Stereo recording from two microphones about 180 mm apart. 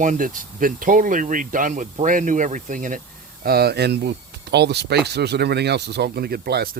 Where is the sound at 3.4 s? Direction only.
60° right (ahead or behind).